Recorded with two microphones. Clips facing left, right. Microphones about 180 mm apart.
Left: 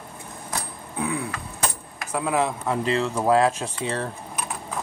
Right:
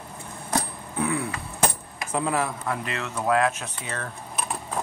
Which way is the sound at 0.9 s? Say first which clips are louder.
Right 1 dB; 15° left (ahead or behind).